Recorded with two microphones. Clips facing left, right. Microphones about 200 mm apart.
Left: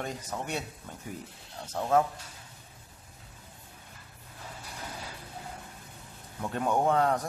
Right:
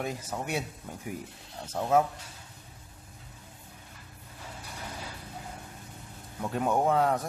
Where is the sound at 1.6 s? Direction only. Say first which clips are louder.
Right 1 dB; 5° right (ahead or behind).